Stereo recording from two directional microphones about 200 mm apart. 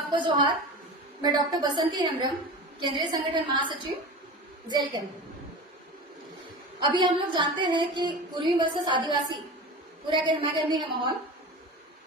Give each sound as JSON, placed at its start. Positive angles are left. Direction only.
{"t": 0.1, "sound": "a woman's voice", "side_deg": -25}
{"t": 4.7, "sound": "a woman's voice", "side_deg": -20}
{"t": 6.7, "sound": "a woman's voice", "side_deg": -20}